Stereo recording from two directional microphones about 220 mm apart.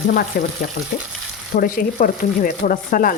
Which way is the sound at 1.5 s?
40° left (ahead or behind).